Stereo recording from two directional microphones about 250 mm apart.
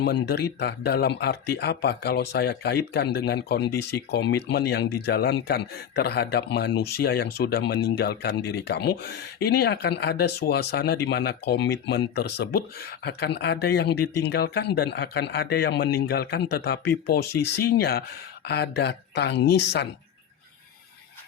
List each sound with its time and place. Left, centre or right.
0.0 s speech: left